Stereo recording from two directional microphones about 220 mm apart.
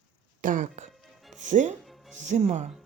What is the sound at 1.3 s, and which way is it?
Speech, 35° right (ahead or behind).